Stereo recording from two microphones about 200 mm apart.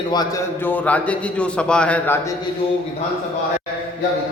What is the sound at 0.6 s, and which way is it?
A man's voice, 10° left (ahead or behind).